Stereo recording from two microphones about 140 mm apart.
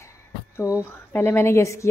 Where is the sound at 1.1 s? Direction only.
15° left (ahead or behind).